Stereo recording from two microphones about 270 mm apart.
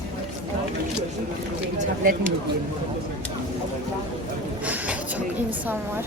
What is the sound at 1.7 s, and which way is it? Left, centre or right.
Speech, right.